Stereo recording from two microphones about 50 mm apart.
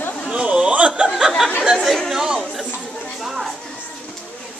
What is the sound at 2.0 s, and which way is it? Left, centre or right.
Speech, centre.